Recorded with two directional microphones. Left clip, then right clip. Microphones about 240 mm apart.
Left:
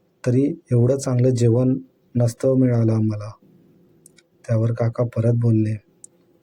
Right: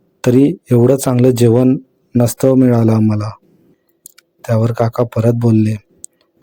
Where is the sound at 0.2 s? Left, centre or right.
Right.